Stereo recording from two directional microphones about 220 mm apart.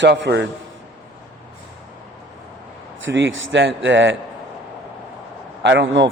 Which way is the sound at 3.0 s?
60° right (ahead or behind).